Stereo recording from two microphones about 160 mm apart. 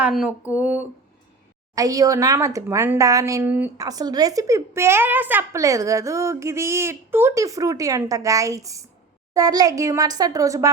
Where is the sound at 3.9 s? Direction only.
25° right (ahead or behind).